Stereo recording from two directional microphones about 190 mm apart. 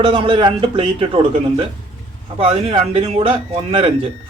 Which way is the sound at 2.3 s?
30° right (ahead or behind).